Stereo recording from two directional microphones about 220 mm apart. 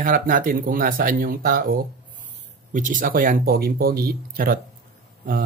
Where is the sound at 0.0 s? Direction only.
40° right (ahead or behind).